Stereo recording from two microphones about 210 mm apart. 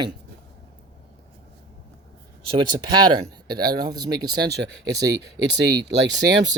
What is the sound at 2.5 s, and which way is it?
Speech, 20° right (ahead or behind).